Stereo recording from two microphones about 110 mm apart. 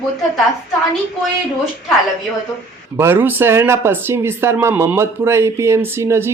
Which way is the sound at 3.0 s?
20° right (ahead or behind).